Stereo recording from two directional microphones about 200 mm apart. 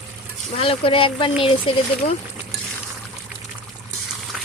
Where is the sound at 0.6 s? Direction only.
25° left (ahead or behind).